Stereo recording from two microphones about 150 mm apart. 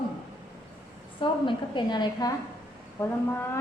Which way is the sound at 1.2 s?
35° left (ahead or behind).